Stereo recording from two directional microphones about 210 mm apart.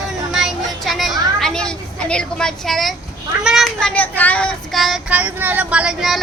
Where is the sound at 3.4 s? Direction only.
Centre (ahead or behind).